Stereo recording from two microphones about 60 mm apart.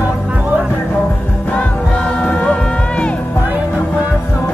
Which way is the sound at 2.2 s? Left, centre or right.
Centre.